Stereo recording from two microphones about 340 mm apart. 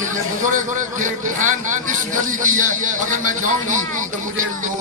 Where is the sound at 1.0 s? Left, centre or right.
Right.